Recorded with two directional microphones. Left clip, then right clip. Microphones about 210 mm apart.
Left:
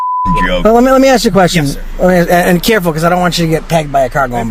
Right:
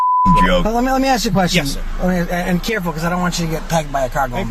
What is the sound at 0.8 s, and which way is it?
Speech, 65° left (ahead or behind).